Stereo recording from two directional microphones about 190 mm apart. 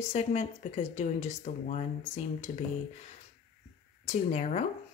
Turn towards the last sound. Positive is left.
turn(degrees=40)  # may be behind; listen again after turning